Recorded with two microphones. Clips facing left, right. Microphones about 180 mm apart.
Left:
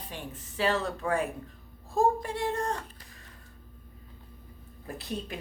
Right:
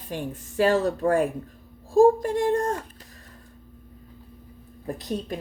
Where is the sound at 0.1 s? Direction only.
45° right (ahead or behind).